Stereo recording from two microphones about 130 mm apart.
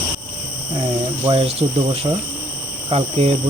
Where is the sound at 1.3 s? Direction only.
50° right (ahead or behind).